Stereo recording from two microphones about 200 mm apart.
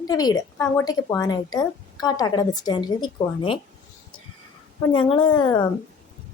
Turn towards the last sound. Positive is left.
turn(degrees=25)  # may be behind; listen again after turning